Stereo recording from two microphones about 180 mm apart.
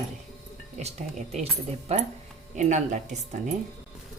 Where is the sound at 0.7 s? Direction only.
40° right (ahead or behind).